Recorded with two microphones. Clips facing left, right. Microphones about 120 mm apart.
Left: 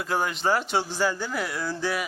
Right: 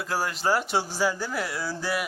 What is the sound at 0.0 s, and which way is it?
Speech, centre (ahead or behind).